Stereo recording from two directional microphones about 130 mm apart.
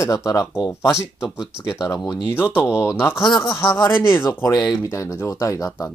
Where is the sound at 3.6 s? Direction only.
35° left (ahead or behind).